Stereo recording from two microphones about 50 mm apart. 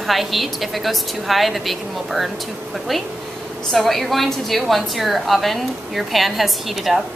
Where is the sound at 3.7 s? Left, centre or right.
Centre.